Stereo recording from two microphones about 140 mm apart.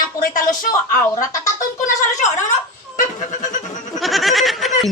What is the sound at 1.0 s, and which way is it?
Speech, 25° left (ahead or behind).